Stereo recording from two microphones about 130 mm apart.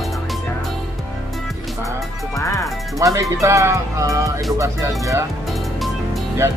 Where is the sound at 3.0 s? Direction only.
25° right (ahead or behind).